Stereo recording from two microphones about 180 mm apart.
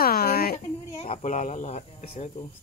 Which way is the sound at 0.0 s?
55° left (ahead or behind).